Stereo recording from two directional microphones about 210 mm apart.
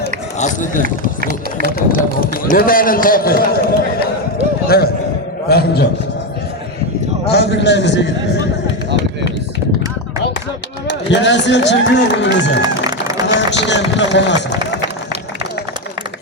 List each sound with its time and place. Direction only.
0.3 s speech: 35° left (ahead or behind)
1.2 s a sound: 45° right (ahead or behind)
2.2 s a man's voice: 40° left (ahead or behind)
7.3 s a man's voice: 50° left (ahead or behind)
10.8 s speech: 55° left (ahead or behind)